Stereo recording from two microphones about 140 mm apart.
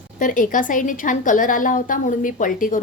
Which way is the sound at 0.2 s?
75° left (ahead or behind).